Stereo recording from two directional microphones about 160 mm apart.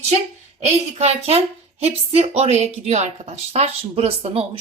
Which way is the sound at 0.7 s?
40° right (ahead or behind).